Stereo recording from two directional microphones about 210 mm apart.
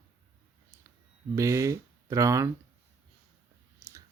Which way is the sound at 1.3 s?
15° right (ahead or behind).